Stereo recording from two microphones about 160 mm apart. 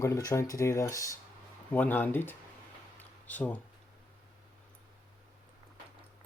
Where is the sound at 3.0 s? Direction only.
10° left (ahead or behind).